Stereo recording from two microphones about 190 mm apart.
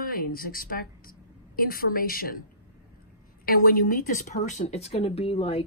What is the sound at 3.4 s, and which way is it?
Speech, 50° left (ahead or behind).